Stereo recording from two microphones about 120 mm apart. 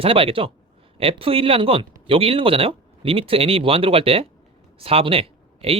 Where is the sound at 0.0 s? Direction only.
50° right (ahead or behind).